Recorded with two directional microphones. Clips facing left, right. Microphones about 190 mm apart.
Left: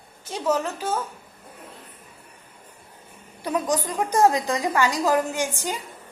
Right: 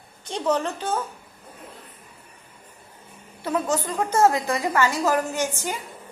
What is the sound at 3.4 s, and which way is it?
A woman's voice, 15° left (ahead or behind).